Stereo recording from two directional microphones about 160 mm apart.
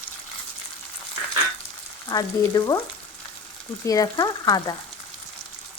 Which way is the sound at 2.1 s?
25° left (ahead or behind).